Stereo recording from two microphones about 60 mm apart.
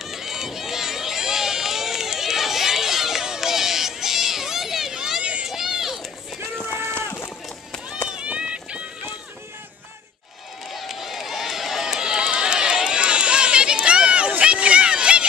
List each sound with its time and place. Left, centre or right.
0.0 s run: centre
8.1 s run: centre
10.7 s run: centre